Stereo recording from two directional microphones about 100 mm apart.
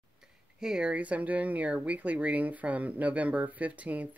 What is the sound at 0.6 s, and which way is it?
Speech, 5° right (ahead or behind).